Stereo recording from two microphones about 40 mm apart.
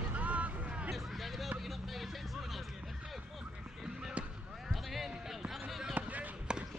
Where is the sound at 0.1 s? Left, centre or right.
Right.